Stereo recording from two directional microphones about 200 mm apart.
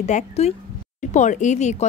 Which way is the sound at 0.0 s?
35° left (ahead or behind).